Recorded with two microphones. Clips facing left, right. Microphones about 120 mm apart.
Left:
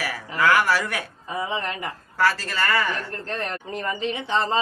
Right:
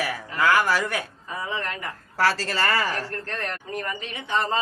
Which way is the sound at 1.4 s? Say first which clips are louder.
Left 3 dB; 15° left (ahead or behind).